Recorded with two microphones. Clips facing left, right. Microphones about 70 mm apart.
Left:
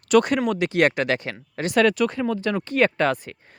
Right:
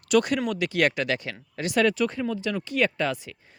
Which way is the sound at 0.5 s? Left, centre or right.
Left.